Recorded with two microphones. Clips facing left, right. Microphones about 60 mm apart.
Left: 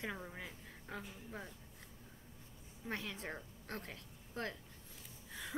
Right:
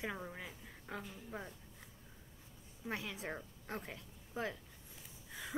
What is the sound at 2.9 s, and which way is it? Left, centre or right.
A woman's voice, centre.